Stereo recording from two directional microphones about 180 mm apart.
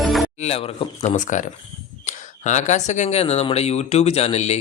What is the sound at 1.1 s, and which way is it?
Speech, 45° left (ahead or behind).